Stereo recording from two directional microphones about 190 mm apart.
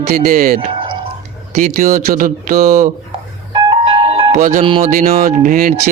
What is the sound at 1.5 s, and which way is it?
Speech, 45° right (ahead or behind).